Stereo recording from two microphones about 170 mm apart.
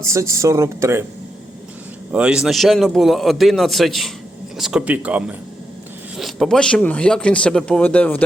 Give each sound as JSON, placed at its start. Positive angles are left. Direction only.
{"t": 0.0, "sound": "speech", "side_deg": -15}
{"t": 2.1, "sound": "a man's voice", "side_deg": -5}